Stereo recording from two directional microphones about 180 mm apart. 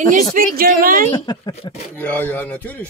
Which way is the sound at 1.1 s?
25° left (ahead or behind).